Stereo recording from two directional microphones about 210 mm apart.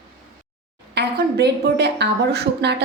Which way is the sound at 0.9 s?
50° right (ahead or behind).